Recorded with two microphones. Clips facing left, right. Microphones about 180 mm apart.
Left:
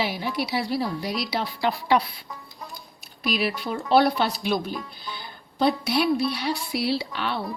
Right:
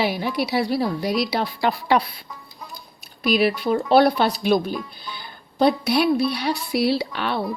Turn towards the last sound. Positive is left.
turn(degrees=-55)  # may be behind; listen again after turning